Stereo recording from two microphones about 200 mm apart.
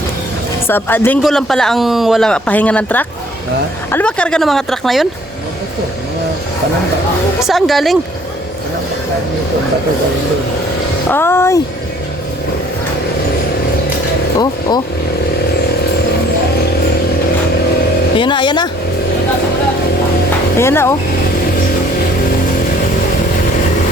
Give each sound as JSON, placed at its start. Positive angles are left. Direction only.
{"t": 0.7, "sound": "speech", "side_deg": 10}
{"t": 7.4, "sound": "speech", "side_deg": 0}
{"t": 11.1, "sound": "speech", "side_deg": 10}
{"t": 18.2, "sound": "speech", "side_deg": 25}
{"t": 20.6, "sound": "speech", "side_deg": 10}